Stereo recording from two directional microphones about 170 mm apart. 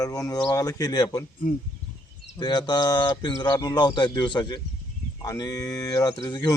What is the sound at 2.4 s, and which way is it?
Speech, 25° left (ahead or behind).